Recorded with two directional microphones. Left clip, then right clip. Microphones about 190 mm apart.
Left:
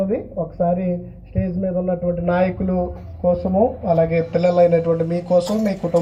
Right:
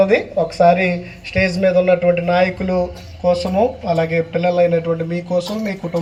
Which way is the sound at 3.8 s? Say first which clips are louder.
Even; 30° left (ahead or behind).